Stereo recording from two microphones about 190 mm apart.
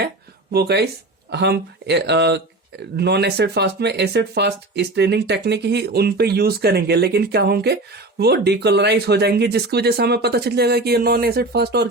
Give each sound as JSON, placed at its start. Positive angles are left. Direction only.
{"t": 0.5, "sound": "speech", "side_deg": -55}